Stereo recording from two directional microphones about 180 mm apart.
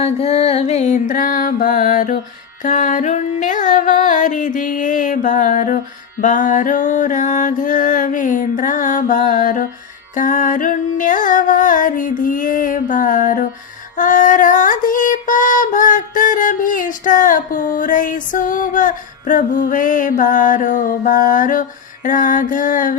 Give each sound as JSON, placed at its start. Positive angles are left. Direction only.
{"t": 0.0, "sound": "music", "side_deg": 35}
{"t": 13.9, "sound": "female singing", "side_deg": 45}